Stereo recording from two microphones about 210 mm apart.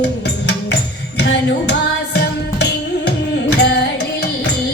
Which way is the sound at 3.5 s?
55° left (ahead or behind).